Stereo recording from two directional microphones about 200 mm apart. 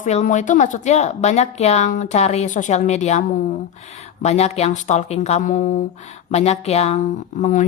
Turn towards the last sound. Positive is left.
turn(degrees=40)  # may be behind; listen again after turning